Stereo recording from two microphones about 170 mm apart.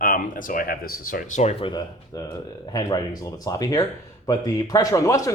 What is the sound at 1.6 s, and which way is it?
Speech, 25° left (ahead or behind).